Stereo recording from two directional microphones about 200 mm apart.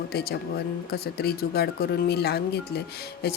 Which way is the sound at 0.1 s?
50° left (ahead or behind).